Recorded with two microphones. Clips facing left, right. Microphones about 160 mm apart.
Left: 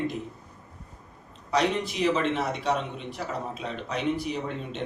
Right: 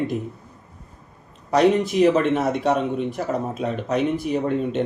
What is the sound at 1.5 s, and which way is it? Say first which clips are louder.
A man's voice: right 9 dB; 50° right (ahead or behind).